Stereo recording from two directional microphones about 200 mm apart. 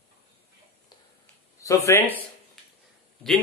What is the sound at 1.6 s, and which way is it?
Speech, 15° left (ahead or behind).